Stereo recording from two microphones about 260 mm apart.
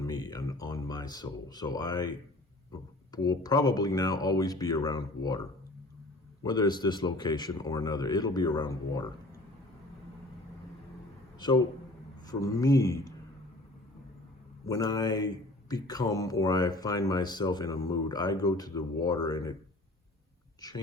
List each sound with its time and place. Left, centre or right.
0.0 s speech: centre
6.4 s speech: centre
11.3 s a man's voice: centre
14.7 s speech: centre
20.6 s speech: centre